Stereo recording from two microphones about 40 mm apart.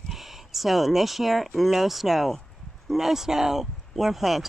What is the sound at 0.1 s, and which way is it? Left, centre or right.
Speech, centre.